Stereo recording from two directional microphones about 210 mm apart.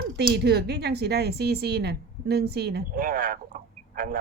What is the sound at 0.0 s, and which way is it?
Speech, 50° right (ahead or behind).